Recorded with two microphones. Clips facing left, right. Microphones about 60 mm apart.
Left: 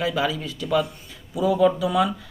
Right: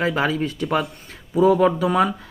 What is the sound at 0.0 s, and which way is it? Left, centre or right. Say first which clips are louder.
Speech: right 3 dB; right.